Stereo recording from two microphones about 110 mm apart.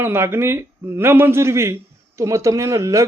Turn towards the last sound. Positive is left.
turn(degrees=-30)  # may be behind; listen again after turning